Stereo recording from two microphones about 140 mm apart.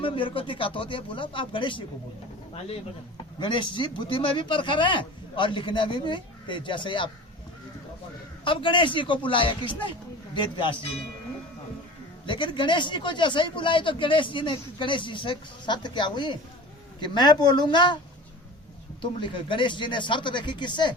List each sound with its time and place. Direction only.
0.0 s speech: 40° left (ahead or behind)
3.3 s speech: 35° left (ahead or behind)
8.4 s speech: 35° left (ahead or behind)
12.2 s speech: 35° left (ahead or behind)
19.2 s speech: 35° left (ahead or behind)